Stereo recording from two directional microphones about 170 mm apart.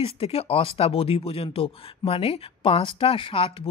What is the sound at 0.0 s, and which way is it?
Speech, 35° left (ahead or behind).